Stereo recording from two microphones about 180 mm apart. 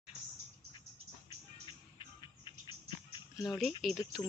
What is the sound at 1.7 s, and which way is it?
Music, 25° left (ahead or behind).